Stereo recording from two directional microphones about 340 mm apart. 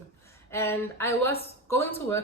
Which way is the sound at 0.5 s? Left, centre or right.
Centre.